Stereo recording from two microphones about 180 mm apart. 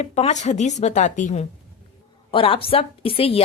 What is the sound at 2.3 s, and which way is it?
Speech, 30° left (ahead or behind).